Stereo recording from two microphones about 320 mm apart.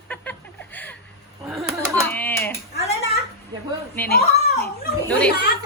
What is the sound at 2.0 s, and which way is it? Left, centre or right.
Speech, centre.